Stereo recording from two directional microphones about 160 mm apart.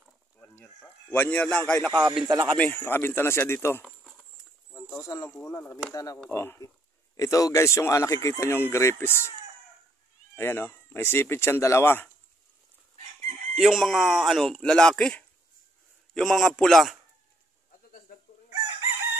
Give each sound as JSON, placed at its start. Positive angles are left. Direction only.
{"t": 0.4, "sound": "a man's voice", "side_deg": 10}
{"t": 1.9, "sound": "speech", "side_deg": -25}
{"t": 2.5, "sound": "speech", "side_deg": 10}
{"t": 10.3, "sound": "speech", "side_deg": 15}
{"t": 13.6, "sound": "speech", "side_deg": 0}